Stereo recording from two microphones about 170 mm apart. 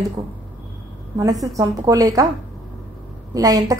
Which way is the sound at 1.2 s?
20° right (ahead or behind).